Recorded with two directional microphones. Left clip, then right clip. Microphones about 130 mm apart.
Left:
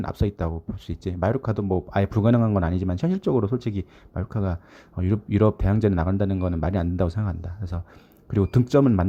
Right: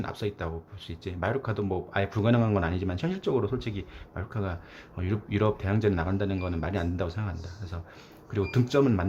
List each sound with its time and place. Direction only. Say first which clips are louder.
0.0 s speech: left 4 dB; 50° left (ahead or behind)